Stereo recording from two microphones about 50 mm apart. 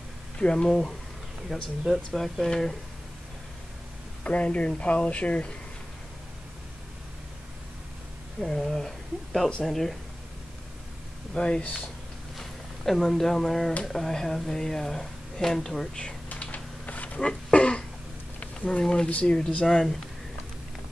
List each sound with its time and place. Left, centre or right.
0.4 s speech: centre
1.5 s speech: centre
4.2 s speech: left
8.4 s speech: centre
11.3 s speech: centre
12.4 s speech: centre
16.3 s a sound: left
17.2 s throat clearing: left
18.7 s speech: centre
19.6 s speech: centre